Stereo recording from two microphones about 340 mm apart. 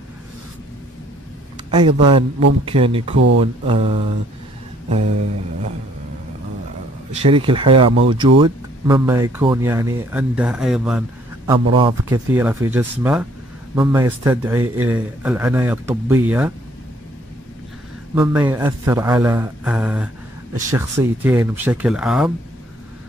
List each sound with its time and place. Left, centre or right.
1.7 s speech: centre
7.1 s speech: centre
11.5 s a man's voice: centre
18.1 s a man's voice: centre